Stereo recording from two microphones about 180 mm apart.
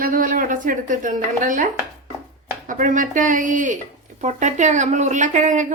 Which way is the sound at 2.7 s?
45° right (ahead or behind).